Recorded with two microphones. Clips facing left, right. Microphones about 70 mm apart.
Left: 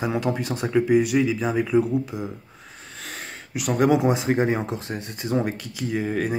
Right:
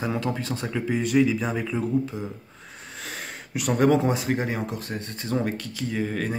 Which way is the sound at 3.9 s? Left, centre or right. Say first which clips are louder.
Left 2 dB; centre.